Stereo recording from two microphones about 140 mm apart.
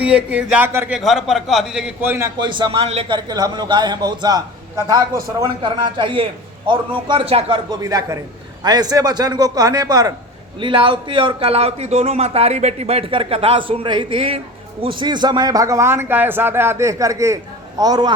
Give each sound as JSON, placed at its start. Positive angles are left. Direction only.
{"t": 0.0, "sound": "speech", "side_deg": -10}
{"t": 0.9, "sound": "a man's voice", "side_deg": 0}
{"t": 2.4, "sound": "a man's voice", "side_deg": -35}
{"t": 3.2, "sound": "a man's voice", "side_deg": -30}
{"t": 10.6, "sound": "a man's voice", "side_deg": -35}